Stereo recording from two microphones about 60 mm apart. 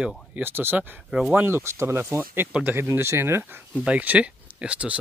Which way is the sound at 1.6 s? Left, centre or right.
Right.